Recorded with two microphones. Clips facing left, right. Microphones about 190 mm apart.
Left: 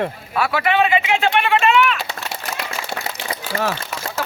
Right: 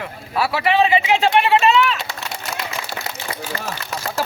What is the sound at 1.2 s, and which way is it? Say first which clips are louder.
Speech: right 3 dB; 35° right (ahead or behind).